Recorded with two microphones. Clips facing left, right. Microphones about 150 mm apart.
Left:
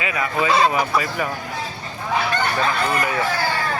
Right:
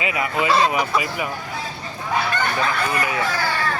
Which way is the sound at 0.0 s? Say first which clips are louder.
Even; 20° right (ahead or behind).